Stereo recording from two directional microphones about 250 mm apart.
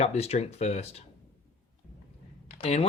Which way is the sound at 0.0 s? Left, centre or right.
Left.